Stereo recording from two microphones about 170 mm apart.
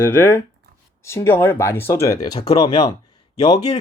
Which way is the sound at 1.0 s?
15° left (ahead or behind).